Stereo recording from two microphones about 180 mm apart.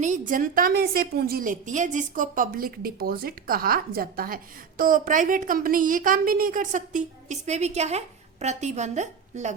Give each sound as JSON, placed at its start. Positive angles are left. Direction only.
{"t": 0.0, "sound": "a woman's voice", "side_deg": -45}